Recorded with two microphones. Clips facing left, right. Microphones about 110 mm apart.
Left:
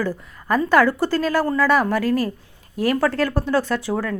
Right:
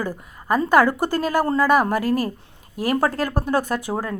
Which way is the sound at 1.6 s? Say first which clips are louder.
Even; 45° right (ahead or behind).